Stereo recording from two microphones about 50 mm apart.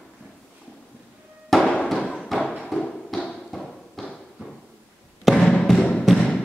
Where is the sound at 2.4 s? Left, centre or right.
Centre.